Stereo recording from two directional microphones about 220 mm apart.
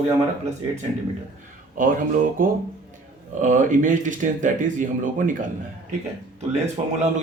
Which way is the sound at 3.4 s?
35° right (ahead or behind).